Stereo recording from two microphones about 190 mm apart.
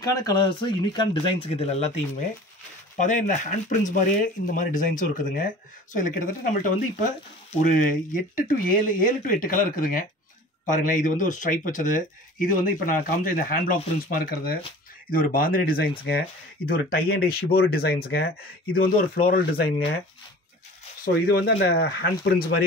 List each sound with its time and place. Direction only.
0.0 s speech: 20° left (ahead or behind); by 19.7 s 50° left (ahead or behind)
21.1 s speech: 55° left (ahead or behind)